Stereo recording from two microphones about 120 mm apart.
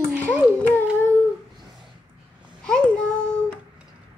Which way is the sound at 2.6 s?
5° left (ahead or behind).